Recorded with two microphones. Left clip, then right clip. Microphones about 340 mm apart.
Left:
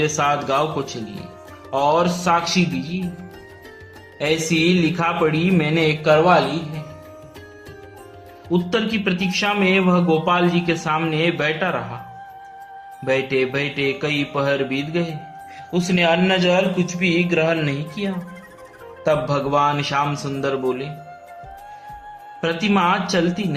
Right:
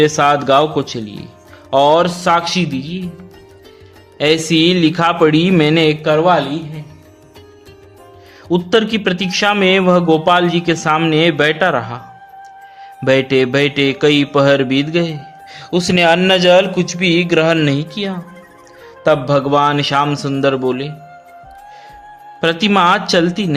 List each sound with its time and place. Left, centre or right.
0.0 s a man's voice: right
4.5 s a man's voice: right
8.4 s a man's voice: right
13.1 s a man's voice: right
22.4 s a man's voice: right